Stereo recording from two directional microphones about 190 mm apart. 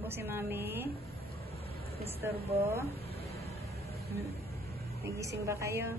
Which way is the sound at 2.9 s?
30° left (ahead or behind).